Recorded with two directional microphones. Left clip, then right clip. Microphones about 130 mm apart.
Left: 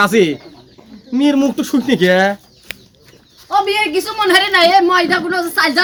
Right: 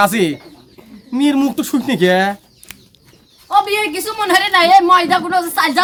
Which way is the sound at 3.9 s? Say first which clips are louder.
Left 2 dB; 15° right (ahead or behind).